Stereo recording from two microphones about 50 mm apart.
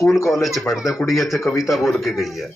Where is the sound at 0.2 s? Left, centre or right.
Left.